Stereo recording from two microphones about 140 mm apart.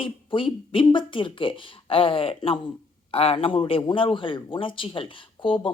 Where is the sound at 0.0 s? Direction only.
35° left (ahead or behind).